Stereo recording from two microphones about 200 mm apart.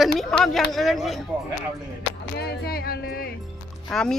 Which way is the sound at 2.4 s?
50° left (ahead or behind).